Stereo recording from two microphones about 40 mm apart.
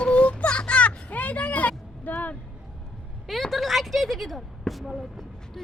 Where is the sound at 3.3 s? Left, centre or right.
Centre.